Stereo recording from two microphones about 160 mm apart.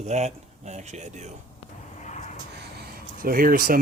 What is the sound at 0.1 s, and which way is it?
Speech, 45° right (ahead or behind).